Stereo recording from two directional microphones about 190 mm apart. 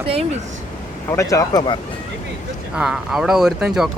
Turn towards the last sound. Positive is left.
turn(degrees=-5)  # may be behind; listen again after turning